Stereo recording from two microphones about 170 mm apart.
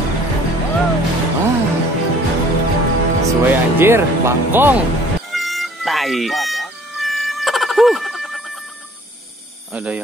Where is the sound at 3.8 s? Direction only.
15° right (ahead or behind).